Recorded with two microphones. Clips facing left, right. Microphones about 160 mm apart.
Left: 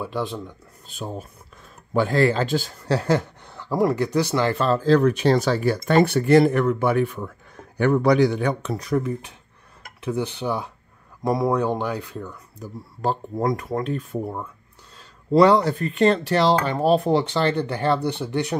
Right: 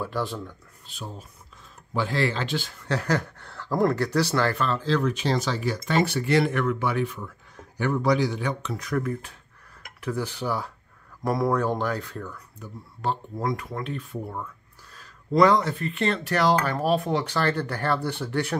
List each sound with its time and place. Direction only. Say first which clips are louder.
0.0 s speech: left 2 dB; 15° left (ahead or behind)
0.9 s a man's voice: left 7 dB; 50° left (ahead or behind); by 4.6 s 15° left (ahead or behind)
4.6 s speech: left 7 dB; 40° left (ahead or behind); by 8.7 s 55° left (ahead or behind)
8.7 s speech: left 4 dB; 35° left (ahead or behind)
9.9 s a man's voice: left 3 dB; 20° left (ahead or behind)
12.5 s a man's voice: left 5 dB; 40° left (ahead or behind); by 18.6 s 20° left (ahead or behind)